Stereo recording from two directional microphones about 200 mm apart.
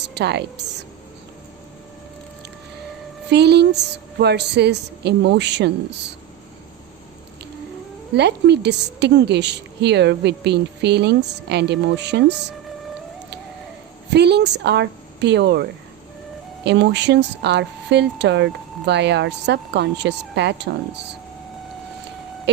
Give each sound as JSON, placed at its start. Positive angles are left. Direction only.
{"t": 0.1, "sound": "a woman's voice", "side_deg": -55}
{"t": 3.2, "sound": "a woman's voice", "side_deg": -55}
{"t": 8.1, "sound": "a woman's voice", "side_deg": -60}
{"t": 14.1, "sound": "speech", "side_deg": -55}
{"t": 16.6, "sound": "a woman's voice", "side_deg": -60}